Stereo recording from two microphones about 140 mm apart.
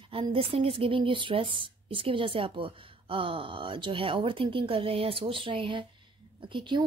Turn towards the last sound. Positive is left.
turn(degrees=-35)  # may be behind; listen again after turning